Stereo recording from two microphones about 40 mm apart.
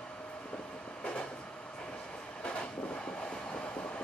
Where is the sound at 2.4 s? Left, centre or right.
Left.